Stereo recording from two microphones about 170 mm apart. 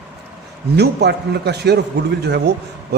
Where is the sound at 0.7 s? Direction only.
75° right (ahead or behind).